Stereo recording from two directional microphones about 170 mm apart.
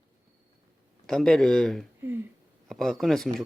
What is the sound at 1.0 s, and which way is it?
Speech, 5° left (ahead or behind).